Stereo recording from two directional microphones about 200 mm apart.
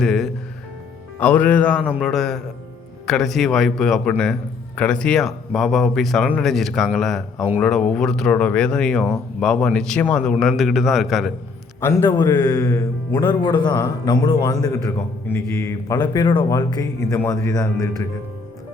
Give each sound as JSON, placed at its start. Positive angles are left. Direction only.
{"t": 0.0, "sound": "a man's voice", "side_deg": 5}
{"t": 11.8, "sound": "speech", "side_deg": 15}